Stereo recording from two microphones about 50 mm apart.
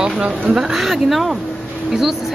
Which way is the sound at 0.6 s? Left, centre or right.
Centre.